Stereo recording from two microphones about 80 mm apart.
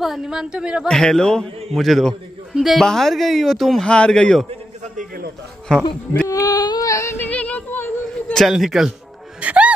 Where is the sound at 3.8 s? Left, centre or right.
Centre.